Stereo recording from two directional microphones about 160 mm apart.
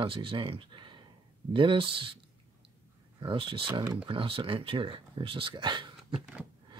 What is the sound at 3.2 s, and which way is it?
Speech, 30° right (ahead or behind).